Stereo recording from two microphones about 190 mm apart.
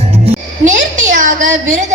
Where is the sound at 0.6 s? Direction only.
45° right (ahead or behind).